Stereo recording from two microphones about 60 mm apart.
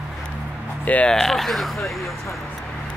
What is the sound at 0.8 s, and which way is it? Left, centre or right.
Speech, left.